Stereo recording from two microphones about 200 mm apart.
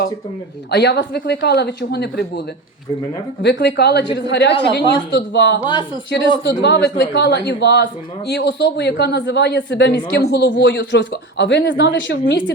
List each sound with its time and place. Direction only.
0.7 s speech: 60° left (ahead or behind)
3.4 s speech: 60° left (ahead or behind)